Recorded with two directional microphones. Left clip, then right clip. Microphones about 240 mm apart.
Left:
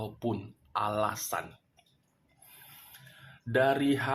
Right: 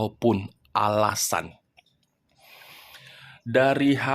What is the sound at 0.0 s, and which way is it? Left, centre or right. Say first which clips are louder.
Speech: right 11 dB; right.